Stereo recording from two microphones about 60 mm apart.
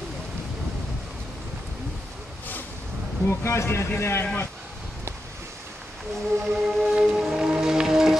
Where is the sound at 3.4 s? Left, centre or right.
Left.